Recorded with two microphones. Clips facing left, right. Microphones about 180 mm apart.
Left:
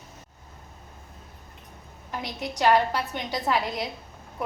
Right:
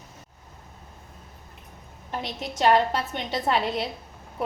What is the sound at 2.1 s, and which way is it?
A woman's voice, 25° right (ahead or behind).